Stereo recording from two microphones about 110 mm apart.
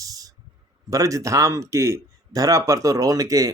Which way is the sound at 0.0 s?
35° right (ahead or behind).